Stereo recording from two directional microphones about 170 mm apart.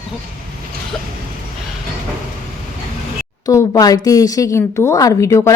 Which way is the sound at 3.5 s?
20° left (ahead or behind).